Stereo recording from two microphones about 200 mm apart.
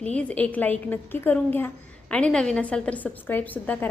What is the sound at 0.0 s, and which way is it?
A woman's voice, 5° left (ahead or behind).